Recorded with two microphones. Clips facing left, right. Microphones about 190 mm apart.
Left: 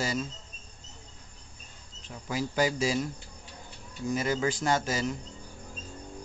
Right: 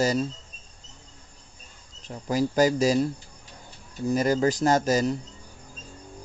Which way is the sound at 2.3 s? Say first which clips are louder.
Right 7 dB; 40° right (ahead or behind).